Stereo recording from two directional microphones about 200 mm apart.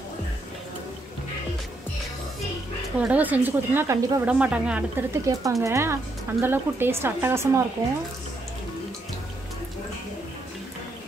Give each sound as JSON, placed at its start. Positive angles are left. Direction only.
{"t": 3.0, "sound": "a woman's voice", "side_deg": -5}